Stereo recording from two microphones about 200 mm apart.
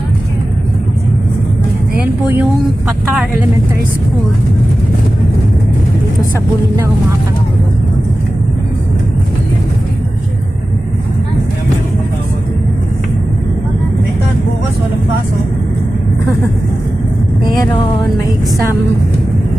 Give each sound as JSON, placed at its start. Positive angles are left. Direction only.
{"t": 2.0, "sound": "speech", "side_deg": -10}
{"t": 17.5, "sound": "speech", "side_deg": 20}